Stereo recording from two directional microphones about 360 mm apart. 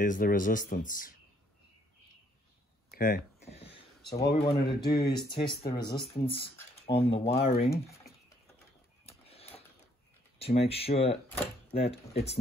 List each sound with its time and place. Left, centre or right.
0.0 s speech: left
2.9 s a sound: left
4.3 s speech: centre
4.8 s speech: left
5.1 s speech: centre
9.0 s a sound: centre
10.4 s speech: centre